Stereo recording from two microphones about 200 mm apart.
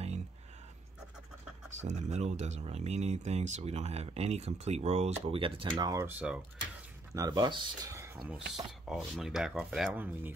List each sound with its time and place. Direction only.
1.8 s speech: 35° right (ahead or behind); by 6.4 s 5° right (ahead or behind)
7.2 s speech: 20° right (ahead or behind)
8.2 s speech: 5° right (ahead or behind)